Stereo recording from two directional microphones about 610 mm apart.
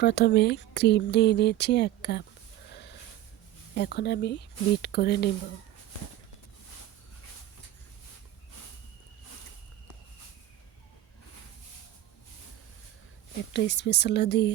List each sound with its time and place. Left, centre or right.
0.0 s speech: centre
3.8 s speech: centre
13.5 s speech: centre